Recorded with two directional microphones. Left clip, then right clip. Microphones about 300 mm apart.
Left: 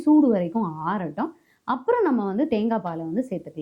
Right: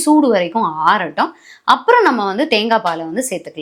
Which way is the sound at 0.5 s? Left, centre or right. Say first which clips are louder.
Right 12 dB; right.